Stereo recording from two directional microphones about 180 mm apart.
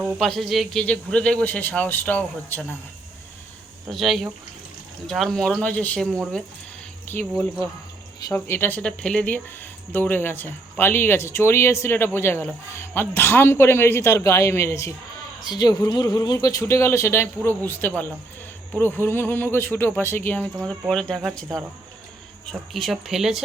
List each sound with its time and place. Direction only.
0.0 s speech: centre (ahead or behind)
3.8 s speech: centre (ahead or behind)
8.3 s speech: 10° left (ahead or behind)
20.6 s speech: centre (ahead or behind)
22.7 s speech: centre (ahead or behind)